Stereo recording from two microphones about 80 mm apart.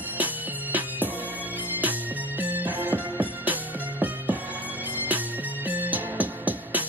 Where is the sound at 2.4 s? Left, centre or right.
Right.